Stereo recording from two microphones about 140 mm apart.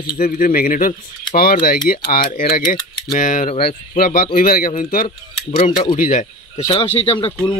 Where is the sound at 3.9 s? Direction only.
90° left.